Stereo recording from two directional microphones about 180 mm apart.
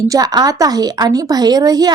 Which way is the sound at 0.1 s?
20° right (ahead or behind).